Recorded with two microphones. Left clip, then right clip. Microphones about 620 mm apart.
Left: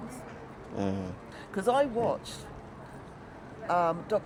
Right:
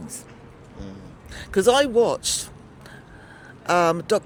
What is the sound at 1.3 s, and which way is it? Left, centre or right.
Speech, right.